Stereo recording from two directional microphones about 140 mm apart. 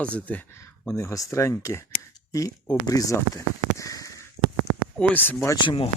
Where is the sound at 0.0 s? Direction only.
10° left (ahead or behind).